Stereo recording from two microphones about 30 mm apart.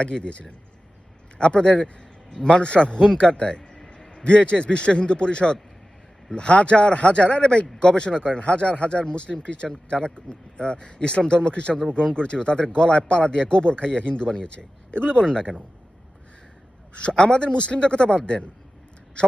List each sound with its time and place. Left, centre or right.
0.0 s a man's voice: left
17.0 s speech: left